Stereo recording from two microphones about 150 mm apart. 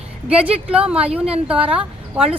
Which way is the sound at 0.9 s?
10° right (ahead or behind).